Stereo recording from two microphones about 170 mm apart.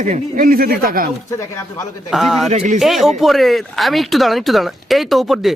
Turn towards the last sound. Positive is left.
turn(degrees=0)  # may be behind; listen again after turning